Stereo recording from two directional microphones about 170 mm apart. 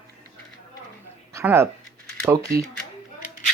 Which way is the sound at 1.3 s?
15° right (ahead or behind).